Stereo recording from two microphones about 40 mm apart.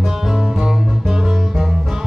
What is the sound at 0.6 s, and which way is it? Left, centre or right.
Music, centre.